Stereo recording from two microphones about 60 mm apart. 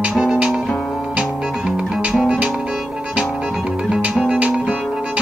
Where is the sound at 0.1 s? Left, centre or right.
Centre.